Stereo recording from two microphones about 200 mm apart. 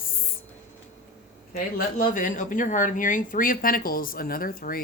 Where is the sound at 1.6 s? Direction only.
45° left (ahead or behind).